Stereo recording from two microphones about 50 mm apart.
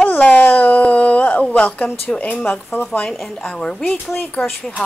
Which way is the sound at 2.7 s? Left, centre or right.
Left.